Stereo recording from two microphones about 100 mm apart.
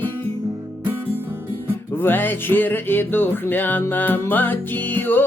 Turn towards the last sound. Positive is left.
turn(degrees=20)  # may be behind; listen again after turning